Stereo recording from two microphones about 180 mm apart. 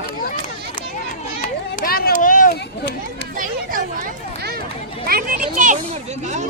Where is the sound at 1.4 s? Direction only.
55° left (ahead or behind).